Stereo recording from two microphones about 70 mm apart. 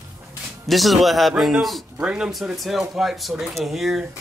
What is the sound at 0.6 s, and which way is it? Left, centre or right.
Speech, centre.